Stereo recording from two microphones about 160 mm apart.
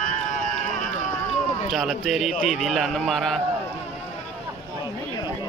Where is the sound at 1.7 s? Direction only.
Centre (ahead or behind).